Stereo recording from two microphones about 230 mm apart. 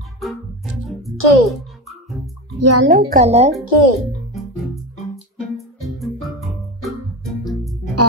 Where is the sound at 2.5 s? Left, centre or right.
Right.